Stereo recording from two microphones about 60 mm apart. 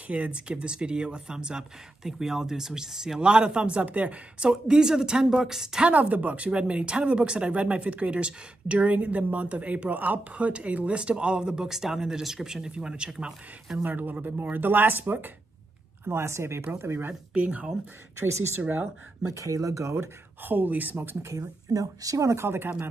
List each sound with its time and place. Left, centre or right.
0.1 s speech: centre
5.9 s speech: right
13.8 s speech: right
16.1 s speech: right
17.3 s speech: right
18.2 s speech: right
19.3 s speech: right
20.4 s speech: right
21.3 s speech: right